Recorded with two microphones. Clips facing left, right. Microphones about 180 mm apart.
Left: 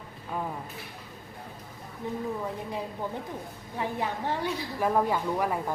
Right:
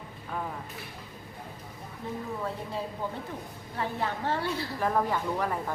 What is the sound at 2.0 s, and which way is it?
Speech, 15° left (ahead or behind).